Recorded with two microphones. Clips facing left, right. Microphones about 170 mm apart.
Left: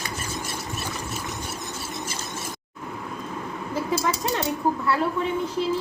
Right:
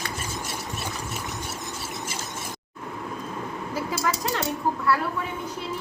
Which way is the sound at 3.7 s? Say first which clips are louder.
Left 3 dB; 20° left (ahead or behind).